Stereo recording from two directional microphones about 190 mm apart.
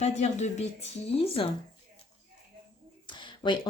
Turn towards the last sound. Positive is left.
turn(degrees=25)  # may be behind; listen again after turning